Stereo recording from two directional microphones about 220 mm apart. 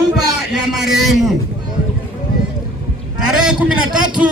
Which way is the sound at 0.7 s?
Centre (ahead or behind).